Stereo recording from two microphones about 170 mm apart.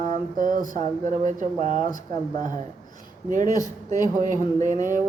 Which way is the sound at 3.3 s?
50° right (ahead or behind).